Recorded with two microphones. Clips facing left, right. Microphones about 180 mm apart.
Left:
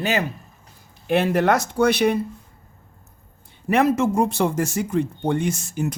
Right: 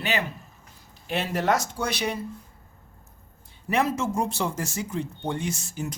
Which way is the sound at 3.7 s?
60° left (ahead or behind).